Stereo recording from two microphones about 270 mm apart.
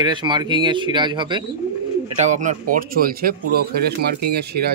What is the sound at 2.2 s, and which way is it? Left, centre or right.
Speech, right.